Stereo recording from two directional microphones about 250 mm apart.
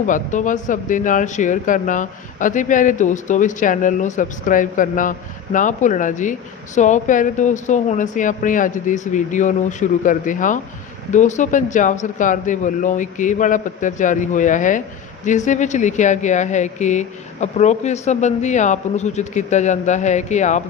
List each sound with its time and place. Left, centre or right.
0.0 s speech: left